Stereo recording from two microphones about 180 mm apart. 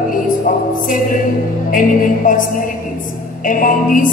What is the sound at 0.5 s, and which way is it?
A woman's voice, 50° left (ahead or behind).